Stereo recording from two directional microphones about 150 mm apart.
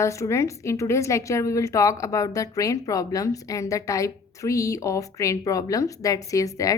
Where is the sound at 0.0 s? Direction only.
20° left (ahead or behind).